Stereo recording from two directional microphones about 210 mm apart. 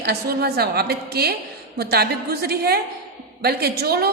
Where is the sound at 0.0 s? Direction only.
50° right (ahead or behind).